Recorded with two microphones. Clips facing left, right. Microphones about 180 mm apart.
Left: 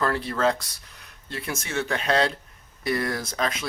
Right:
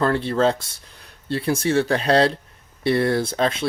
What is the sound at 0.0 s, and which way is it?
Speech, 30° right (ahead or behind).